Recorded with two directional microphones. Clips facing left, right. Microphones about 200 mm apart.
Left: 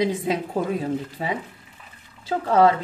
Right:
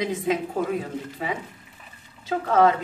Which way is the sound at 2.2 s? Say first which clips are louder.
Left 2 dB; 30° left (ahead or behind).